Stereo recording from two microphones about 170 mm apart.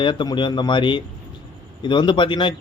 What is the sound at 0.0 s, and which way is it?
A man's voice, 30° left (ahead or behind).